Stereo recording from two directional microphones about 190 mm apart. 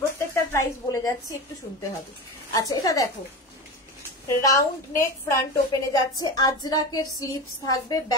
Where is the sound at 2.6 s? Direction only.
20° left (ahead or behind).